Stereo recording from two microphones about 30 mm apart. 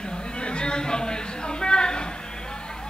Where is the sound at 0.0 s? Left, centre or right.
Left.